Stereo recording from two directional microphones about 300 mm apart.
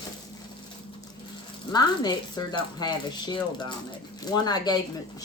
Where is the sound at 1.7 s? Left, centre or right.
Centre.